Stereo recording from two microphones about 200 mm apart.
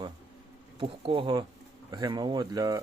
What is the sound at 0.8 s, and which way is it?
Speech, 25° right (ahead or behind).